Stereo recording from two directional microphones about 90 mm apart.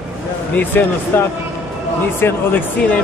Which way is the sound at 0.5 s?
20° left (ahead or behind).